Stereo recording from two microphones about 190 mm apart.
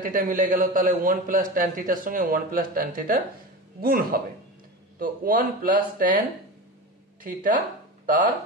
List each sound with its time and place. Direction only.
0.0 s a man's voice: 45° right (ahead or behind)
7.2 s a man's voice: 45° right (ahead or behind)